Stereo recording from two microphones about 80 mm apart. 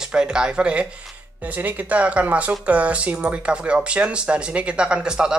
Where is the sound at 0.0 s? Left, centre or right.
Centre.